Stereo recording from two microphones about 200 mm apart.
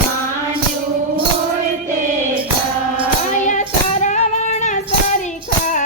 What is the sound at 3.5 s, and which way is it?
Music, 35° left (ahead or behind).